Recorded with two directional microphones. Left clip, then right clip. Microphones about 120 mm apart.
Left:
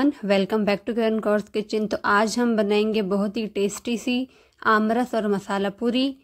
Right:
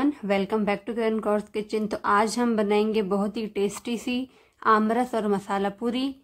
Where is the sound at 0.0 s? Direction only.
40° left (ahead or behind).